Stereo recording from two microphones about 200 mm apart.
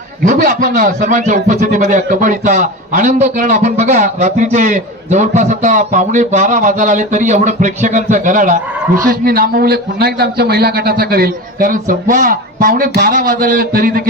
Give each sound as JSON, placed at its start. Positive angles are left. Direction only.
{"t": 0.3, "sound": "a man's voice", "side_deg": -40}